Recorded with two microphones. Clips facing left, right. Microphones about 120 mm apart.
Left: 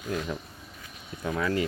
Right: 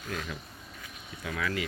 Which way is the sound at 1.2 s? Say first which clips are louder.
Left 6 dB; 30° left (ahead or behind).